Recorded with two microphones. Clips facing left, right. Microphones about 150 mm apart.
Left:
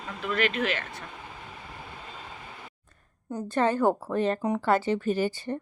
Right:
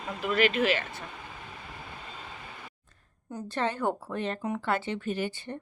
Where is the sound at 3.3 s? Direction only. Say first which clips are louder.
Left 6 dB; 45° left (ahead or behind).